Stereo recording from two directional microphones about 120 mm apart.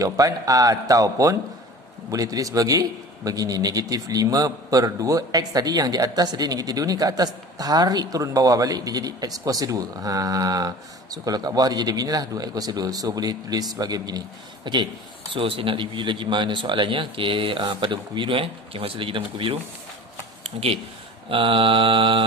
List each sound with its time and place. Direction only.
0.0 s a man's voice: 30° right (ahead or behind); by 19.6 s 45° right (ahead or behind)
20.4 s a man's voice: 55° right (ahead or behind)